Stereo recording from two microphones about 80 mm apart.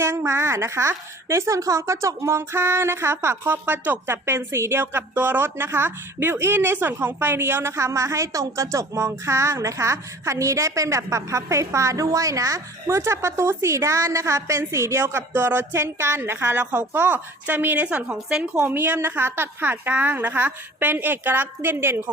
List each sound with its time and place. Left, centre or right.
0.0 s speech: right
17.8 s speech: centre
18.7 s a woman's voice: right